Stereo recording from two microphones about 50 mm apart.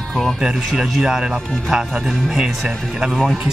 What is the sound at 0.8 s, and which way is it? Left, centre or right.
Speech, centre.